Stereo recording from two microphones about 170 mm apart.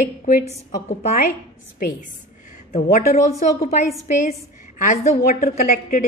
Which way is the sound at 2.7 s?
45° left (ahead or behind).